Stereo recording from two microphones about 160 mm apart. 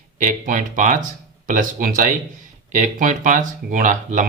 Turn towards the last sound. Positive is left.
turn(degrees=-55)  # may be behind; listen again after turning